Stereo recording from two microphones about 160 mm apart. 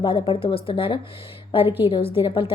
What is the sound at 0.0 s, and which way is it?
A woman's voice, 35° left (ahead or behind).